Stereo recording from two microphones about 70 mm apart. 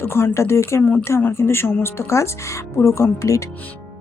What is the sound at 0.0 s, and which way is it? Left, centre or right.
Speech, left.